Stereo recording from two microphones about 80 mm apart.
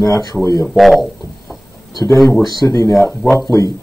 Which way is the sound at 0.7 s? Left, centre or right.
Centre.